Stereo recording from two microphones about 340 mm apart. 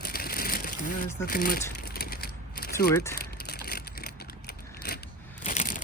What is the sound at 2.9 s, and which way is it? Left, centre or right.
Speech, centre.